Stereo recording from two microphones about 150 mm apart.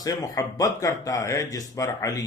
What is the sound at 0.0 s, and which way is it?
Speech, 25° left (ahead or behind).